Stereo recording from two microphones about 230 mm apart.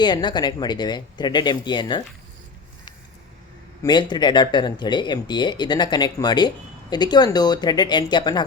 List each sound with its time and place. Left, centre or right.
0.0 s speech: centre
3.8 s speech: centre